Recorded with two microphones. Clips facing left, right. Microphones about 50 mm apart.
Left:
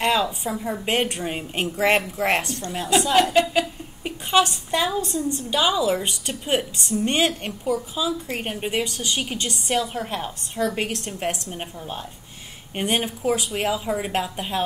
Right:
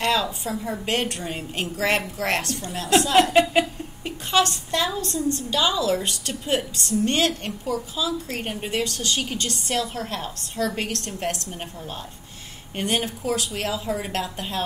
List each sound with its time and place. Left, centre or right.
0.0 s a woman's voice: centre
4.0 s a woman's voice: centre
12.7 s a woman's voice: centre